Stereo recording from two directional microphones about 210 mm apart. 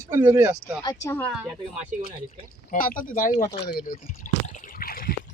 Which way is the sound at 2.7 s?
40° left (ahead or behind).